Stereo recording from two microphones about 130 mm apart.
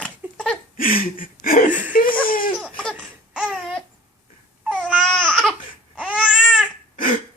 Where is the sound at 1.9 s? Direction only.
90° left.